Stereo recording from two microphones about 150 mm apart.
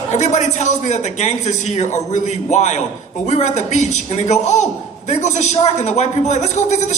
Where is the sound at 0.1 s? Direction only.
50° left (ahead or behind).